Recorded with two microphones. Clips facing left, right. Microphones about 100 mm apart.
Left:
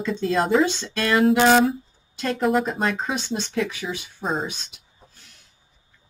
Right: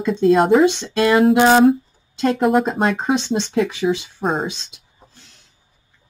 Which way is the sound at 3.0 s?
25° right (ahead or behind).